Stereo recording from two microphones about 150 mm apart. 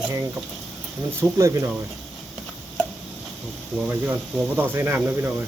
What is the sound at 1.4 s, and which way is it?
Speech, 20° right (ahead or behind).